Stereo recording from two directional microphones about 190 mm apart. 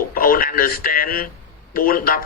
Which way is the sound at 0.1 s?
50° left (ahead or behind).